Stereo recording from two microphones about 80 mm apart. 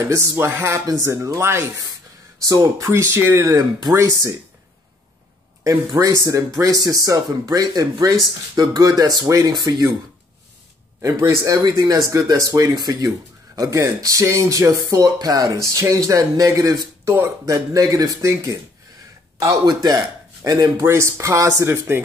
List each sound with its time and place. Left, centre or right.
0.0 s speech: right
2.4 s speech: right
2.9 s speech: right
3.4 s speech: right
5.6 s speech: right
11.0 s speech: right
13.6 s speech: right
17.0 s speech: right
17.5 s speech: right
18.2 s speech: right
19.4 s speech: right
20.8 s speech: right